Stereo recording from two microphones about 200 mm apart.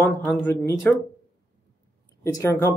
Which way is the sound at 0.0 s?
10° left (ahead or behind).